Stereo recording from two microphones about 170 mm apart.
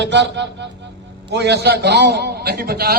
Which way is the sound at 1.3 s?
80° right.